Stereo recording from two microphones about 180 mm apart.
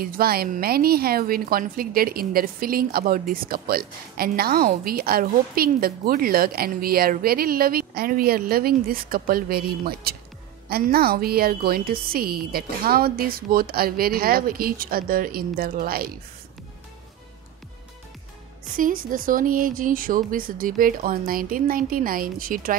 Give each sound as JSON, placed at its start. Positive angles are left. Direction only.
{"t": 0.0, "sound": "a woman's voice", "side_deg": -55}
{"t": 18.8, "sound": "speech", "side_deg": -50}